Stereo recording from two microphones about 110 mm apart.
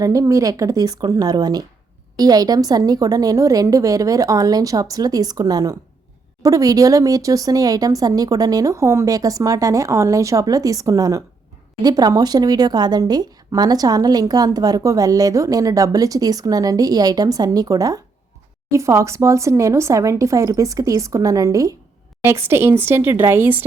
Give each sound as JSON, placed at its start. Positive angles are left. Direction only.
{"t": 0.0, "sound": "a woman's voice", "side_deg": -30}